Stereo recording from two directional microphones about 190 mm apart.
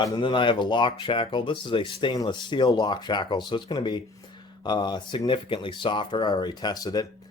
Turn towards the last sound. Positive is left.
turn(degrees=20)  # may be behind; listen again after turning